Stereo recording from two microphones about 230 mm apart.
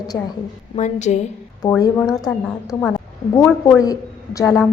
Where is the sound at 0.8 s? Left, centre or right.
Left.